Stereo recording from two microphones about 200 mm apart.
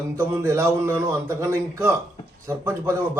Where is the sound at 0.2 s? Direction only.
15° right (ahead or behind).